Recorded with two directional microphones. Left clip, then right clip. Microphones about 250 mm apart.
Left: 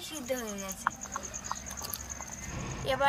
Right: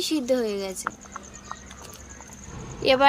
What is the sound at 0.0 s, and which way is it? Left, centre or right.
Speech, right.